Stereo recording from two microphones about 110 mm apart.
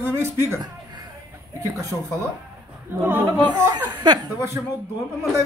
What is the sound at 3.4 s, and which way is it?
Speech, 40° right (ahead or behind).